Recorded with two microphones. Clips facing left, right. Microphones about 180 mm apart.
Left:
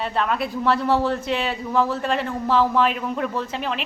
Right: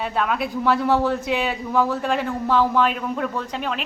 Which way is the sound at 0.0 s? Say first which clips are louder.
Even; 5° right (ahead or behind).